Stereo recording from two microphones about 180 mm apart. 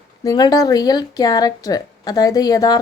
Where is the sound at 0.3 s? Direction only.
20° left (ahead or behind).